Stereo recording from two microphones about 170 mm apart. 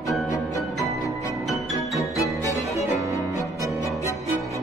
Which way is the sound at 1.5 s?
20° left (ahead or behind).